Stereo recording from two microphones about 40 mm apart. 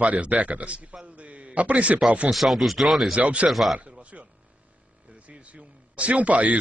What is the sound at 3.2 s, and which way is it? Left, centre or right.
Speech, right.